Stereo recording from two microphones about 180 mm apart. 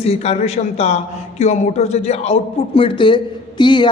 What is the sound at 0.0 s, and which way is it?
Speech, 35° left (ahead or behind).